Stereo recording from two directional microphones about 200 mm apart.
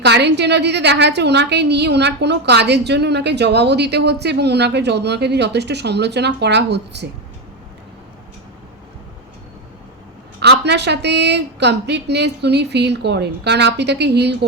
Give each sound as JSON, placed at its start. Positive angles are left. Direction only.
{"t": 0.0, "sound": "a woman's voice", "side_deg": -60}
{"t": 10.4, "sound": "a woman's voice", "side_deg": -55}